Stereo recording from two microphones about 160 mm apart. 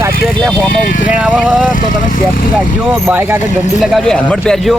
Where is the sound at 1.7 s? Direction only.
55° left (ahead or behind).